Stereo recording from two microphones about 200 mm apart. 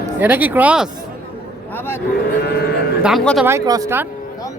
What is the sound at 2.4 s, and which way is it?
Speech, 50° left (ahead or behind).